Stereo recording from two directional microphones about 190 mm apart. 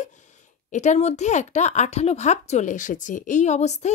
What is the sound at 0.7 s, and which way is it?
Speech, 40° left (ahead or behind).